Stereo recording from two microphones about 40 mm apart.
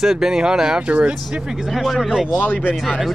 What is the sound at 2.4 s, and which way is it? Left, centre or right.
Speech, left.